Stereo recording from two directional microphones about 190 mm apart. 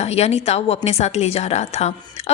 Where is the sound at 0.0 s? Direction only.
35° left (ahead or behind).